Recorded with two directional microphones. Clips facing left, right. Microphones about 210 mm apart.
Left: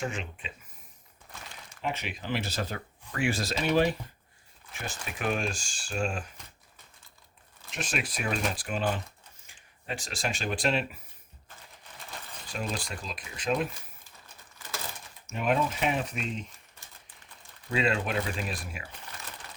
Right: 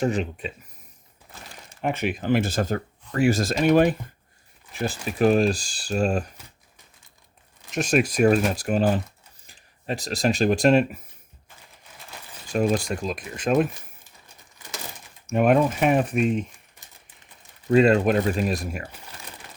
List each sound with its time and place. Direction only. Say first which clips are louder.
0.0 s speech: right 11 dB; 40° right (ahead or behind)
1.8 s speech: right 9 dB; 50° right (ahead or behind)
4.7 s speech: right 11 dB; 35° right (ahead or behind)
7.7 s speech: right 12 dB; 45° right (ahead or behind)
12.5 s speech: right 13 dB; 50° right (ahead or behind)
15.3 s speech: right 9 dB; 50° right (ahead or behind)
17.7 s speech: right 11 dB; 45° right (ahead or behind)